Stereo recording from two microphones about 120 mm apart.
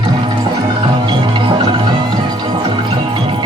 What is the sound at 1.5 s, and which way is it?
Music, 40° right (ahead or behind).